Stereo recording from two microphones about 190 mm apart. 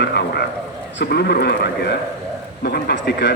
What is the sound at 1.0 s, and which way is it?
A man's voice, 60° left (ahead or behind).